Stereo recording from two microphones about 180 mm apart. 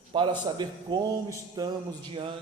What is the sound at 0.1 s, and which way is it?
A man's voice, 25° right (ahead or behind).